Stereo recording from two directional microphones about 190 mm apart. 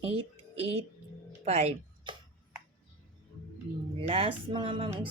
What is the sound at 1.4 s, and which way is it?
Music, 35° right (ahead or behind).